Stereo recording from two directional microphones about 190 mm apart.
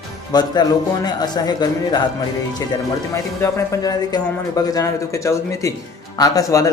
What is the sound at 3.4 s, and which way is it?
Speech, 15° left (ahead or behind).